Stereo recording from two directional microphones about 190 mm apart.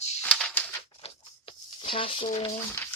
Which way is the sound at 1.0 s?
30° left (ahead or behind).